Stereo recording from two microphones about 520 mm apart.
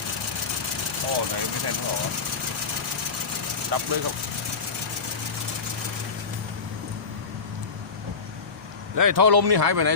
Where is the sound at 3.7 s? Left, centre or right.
Right.